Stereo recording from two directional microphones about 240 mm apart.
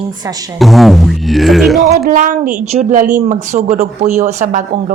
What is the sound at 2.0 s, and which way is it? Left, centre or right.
A woman's voice, right.